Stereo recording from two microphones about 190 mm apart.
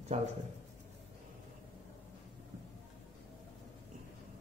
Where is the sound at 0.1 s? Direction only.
35° right (ahead or behind).